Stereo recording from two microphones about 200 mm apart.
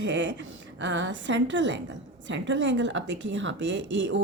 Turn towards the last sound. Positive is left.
turn(degrees=-65)  # may be behind; listen again after turning